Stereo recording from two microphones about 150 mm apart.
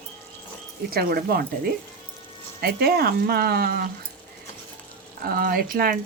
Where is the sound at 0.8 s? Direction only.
85° right.